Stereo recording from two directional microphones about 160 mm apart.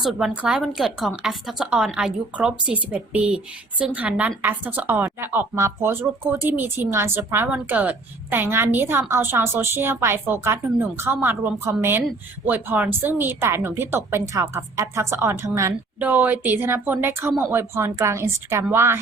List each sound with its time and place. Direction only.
0.0 s a woman's voice: centre (ahead or behind)